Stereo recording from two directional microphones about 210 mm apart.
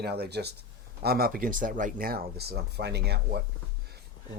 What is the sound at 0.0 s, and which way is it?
Speech, 50° right (ahead or behind).